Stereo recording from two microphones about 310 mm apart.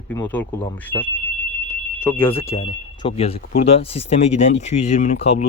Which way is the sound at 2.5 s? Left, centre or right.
Centre.